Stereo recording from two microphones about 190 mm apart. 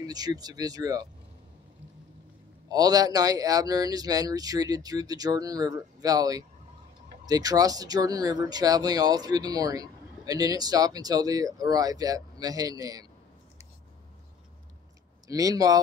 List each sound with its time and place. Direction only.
0.0 s speech: 20° right (ahead or behind)
2.7 s speech: 20° right (ahead or behind)
15.2 s speech: 20° right (ahead or behind)